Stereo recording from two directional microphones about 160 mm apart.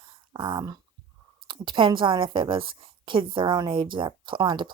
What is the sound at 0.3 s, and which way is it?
A woman's voice, 30° right (ahead or behind).